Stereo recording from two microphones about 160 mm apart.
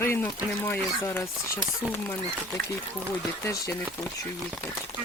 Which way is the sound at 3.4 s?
20° left (ahead or behind).